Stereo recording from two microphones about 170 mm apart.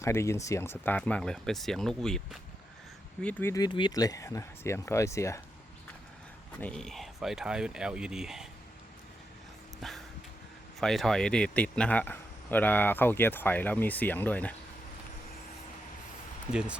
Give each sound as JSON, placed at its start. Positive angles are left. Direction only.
{"t": 0.0, "sound": "speech", "side_deg": 15}
{"t": 3.5, "sound": "speech", "side_deg": 25}
{"t": 6.6, "sound": "speech", "side_deg": 5}
{"t": 9.8, "sound": "speech", "side_deg": 0}
{"t": 16.5, "sound": "speech", "side_deg": -5}